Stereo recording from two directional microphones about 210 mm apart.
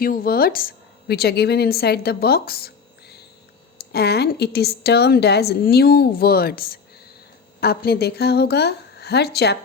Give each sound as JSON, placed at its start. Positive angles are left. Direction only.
{"t": 0.0, "sound": "a woman's voice", "side_deg": 45}